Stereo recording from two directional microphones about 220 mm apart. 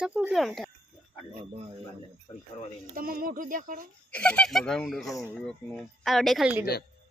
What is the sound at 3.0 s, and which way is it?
Speech, 40° right (ahead or behind).